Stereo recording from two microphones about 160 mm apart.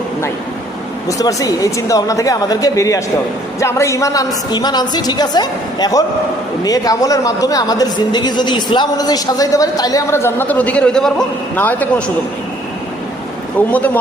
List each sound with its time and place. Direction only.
1.0 s a woman's voice: 20° left (ahead or behind)
13.7 s speech: 10° left (ahead or behind)